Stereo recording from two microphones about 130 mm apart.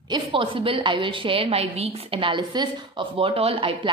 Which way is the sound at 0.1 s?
40° right (ahead or behind).